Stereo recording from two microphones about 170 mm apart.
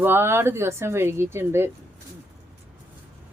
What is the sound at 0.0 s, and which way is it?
Speech, 15° right (ahead or behind).